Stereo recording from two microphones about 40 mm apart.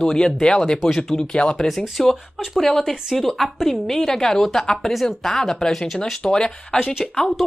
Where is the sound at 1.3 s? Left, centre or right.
Left.